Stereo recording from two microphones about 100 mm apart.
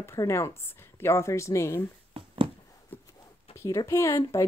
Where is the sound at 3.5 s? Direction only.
65° left (ahead or behind).